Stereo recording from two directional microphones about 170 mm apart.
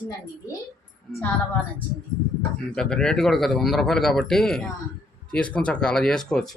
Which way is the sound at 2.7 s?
5° left (ahead or behind).